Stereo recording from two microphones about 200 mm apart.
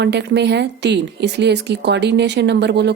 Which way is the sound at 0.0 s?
60° right (ahead or behind).